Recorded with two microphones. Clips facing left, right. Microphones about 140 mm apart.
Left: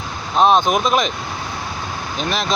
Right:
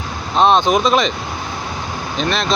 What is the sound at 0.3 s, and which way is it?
Speech, 5° left (ahead or behind).